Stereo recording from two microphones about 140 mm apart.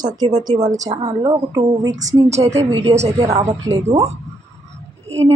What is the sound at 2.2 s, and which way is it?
Speech, 50° right (ahead or behind).